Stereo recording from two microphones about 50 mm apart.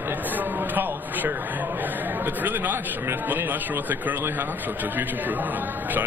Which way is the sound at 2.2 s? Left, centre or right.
Right.